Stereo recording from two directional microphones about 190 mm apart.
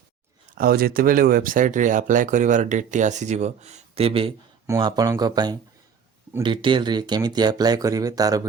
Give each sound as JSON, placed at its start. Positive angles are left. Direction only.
{"t": 0.5, "sound": "speech", "side_deg": -50}
{"t": 4.6, "sound": "speech", "side_deg": -20}